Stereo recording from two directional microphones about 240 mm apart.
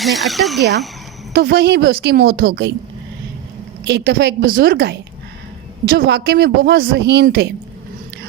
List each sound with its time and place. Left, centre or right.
0.0 s speech: centre
1.3 s speech: right
3.8 s a woman's voice: right